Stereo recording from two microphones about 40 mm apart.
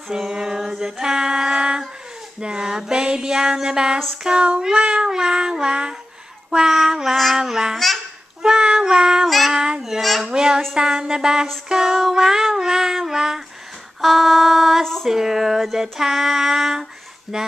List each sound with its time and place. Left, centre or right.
0.1 s female singing: centre
2.4 s a sound: right
5.0 s a sound: centre
6.5 s female singing: centre
8.4 s cat: centre
8.7 s female singing: centre
9.2 s child singing: centre
9.5 s child singing: centre
10.2 s female singing: centre
14.0 s a sound: centre
15.0 s female singing: centre